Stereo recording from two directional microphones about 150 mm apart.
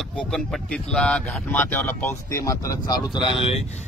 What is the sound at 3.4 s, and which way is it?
Speech, 45° left (ahead or behind).